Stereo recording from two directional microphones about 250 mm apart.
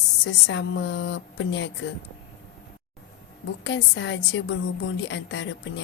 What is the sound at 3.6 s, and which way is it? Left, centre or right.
A woman's voice, left.